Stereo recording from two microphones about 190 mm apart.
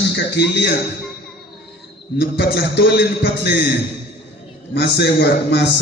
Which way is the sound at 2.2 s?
55° left (ahead or behind).